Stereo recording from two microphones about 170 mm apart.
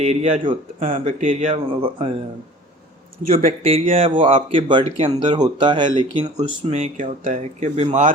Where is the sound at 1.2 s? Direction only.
45° right (ahead or behind).